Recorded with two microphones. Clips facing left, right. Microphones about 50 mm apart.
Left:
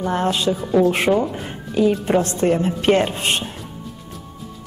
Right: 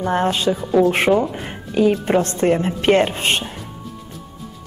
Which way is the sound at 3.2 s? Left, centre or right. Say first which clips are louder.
Right 2 dB; right.